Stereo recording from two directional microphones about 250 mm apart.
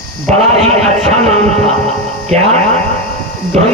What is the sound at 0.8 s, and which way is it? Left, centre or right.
Speech, right.